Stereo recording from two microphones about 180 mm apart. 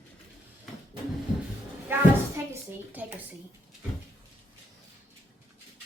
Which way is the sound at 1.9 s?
10° right (ahead or behind).